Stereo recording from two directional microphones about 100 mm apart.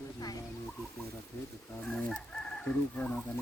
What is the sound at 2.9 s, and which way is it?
Chicken, 15° left (ahead or behind).